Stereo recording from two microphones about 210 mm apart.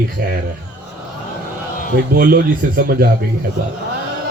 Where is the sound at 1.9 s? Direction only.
45° right (ahead or behind).